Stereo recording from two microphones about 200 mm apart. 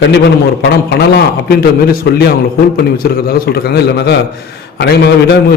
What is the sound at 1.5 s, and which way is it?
A man's voice, 50° left (ahead or behind).